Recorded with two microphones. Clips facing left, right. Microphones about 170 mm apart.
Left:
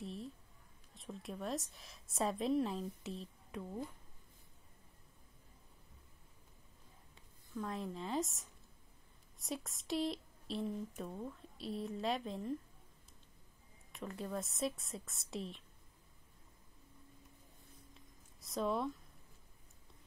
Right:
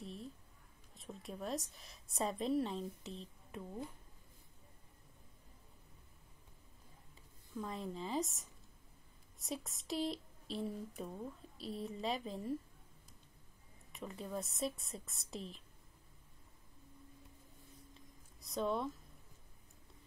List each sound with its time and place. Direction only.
0.0 s a sound: centre (ahead or behind)
0.9 s a woman's voice: centre (ahead or behind)
7.5 s a woman's voice: centre (ahead or behind)
13.9 s a woman's voice: centre (ahead or behind)
18.4 s speech: centre (ahead or behind)